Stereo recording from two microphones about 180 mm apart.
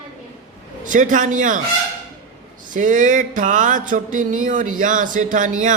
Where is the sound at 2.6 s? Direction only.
45° right (ahead or behind).